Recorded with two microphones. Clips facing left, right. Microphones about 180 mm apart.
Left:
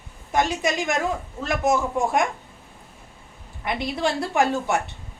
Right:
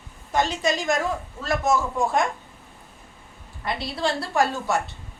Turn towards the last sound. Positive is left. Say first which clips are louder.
# left 2 dB
turn(degrees=15)  # may be behind; listen again after turning